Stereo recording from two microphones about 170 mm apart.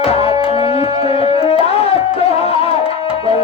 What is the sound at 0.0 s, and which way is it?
Tabla, 35° left (ahead or behind).